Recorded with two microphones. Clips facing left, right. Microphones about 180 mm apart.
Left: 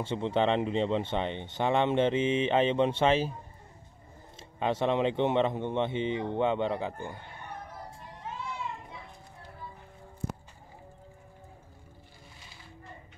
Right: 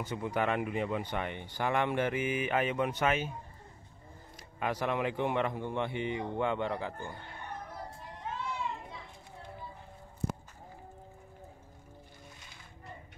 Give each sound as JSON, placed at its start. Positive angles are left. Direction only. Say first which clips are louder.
{"t": 0.0, "sound": "speech", "louder": "left 5 dB", "side_deg": 25}
{"t": 4.4, "sound": "speech", "louder": "left 5 dB", "side_deg": 25}